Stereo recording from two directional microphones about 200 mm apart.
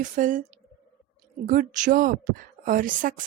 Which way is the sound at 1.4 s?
40° right (ahead or behind).